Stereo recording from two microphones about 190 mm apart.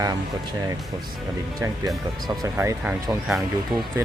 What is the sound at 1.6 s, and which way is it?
Speech, 15° right (ahead or behind).